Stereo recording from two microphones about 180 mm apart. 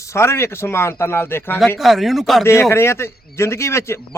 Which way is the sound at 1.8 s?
Centre (ahead or behind).